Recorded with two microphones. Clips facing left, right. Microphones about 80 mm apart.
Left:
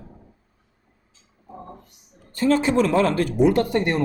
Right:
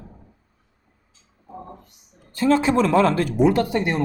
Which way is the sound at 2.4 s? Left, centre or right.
Right.